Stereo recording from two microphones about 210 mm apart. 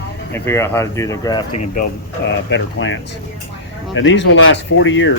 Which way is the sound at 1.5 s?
40° left (ahead or behind).